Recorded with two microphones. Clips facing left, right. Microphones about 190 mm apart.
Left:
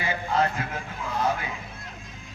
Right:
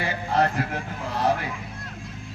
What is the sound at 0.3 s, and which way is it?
Speech, 40° right (ahead or behind).